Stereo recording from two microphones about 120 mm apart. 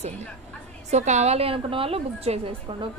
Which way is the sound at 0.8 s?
70° right (ahead or behind).